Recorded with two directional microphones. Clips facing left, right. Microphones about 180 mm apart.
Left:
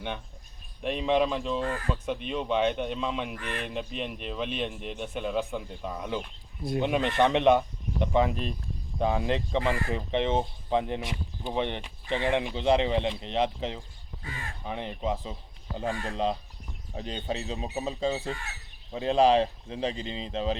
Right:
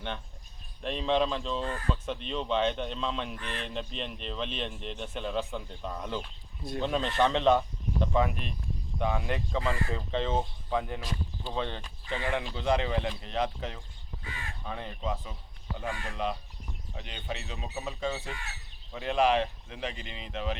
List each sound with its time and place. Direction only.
0.8 s speech: 10° left (ahead or behind); by 20.6 s 30° left (ahead or behind)